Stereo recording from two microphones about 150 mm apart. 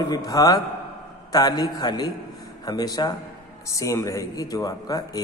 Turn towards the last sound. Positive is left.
turn(degrees=25)  # may be behind; listen again after turning